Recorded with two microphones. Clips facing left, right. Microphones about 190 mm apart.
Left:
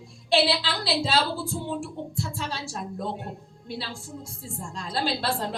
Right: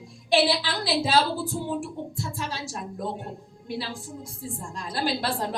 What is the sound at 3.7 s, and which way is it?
Speech, 15° right (ahead or behind).